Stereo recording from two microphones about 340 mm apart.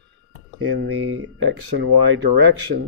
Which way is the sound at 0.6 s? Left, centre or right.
Right.